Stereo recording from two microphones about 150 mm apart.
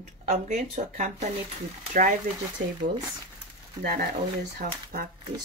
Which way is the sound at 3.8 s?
80° right.